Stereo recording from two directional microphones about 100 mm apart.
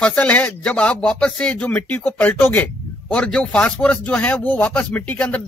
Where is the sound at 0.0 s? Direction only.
10° left (ahead or behind).